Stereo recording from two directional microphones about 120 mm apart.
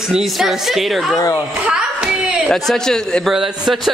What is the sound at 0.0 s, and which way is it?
Speech, centre (ahead or behind).